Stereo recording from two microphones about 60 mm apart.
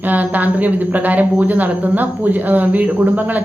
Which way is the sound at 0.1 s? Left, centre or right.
Right.